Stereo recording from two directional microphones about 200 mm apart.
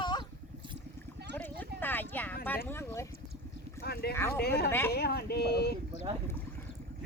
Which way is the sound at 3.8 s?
50° left (ahead or behind).